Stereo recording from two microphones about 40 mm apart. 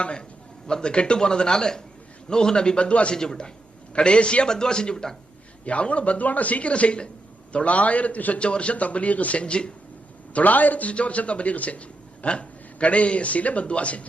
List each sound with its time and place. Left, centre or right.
0.0 s a man's voice: left
3.2 s a man's voice: centre
5.6 s a man's voice: left
10.3 s a man's voice: left